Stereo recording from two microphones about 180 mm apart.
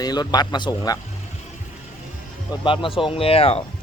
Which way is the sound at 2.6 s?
30° left (ahead or behind).